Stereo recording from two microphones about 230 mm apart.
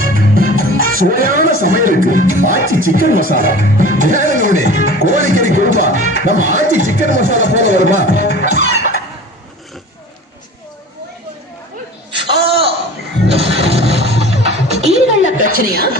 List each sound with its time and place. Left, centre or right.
0.0 s speech: right
8.4 s chicken: right
12.1 s a sound: right
13.2 s music: right